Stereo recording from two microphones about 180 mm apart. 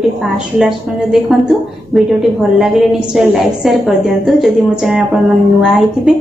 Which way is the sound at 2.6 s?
Centre (ahead or behind).